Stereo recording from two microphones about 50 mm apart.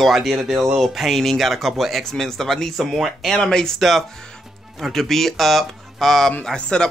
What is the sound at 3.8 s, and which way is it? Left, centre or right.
Speech, centre.